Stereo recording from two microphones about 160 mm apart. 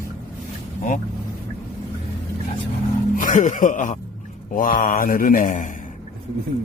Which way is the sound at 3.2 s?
55° left (ahead or behind).